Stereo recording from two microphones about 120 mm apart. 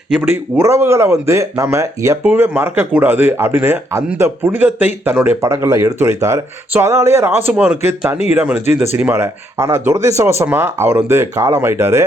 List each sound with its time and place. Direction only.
0.2 s speech: 15° right (ahead or behind)
9.1 s speech: 25° right (ahead or behind)